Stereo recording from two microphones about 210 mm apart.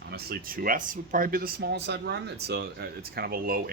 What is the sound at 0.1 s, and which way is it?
Speech, 50° right (ahead or behind).